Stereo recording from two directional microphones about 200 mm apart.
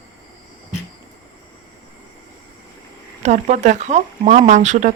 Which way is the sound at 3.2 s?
35° right (ahead or behind).